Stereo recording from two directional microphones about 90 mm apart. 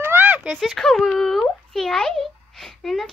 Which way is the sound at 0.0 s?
20° right (ahead or behind).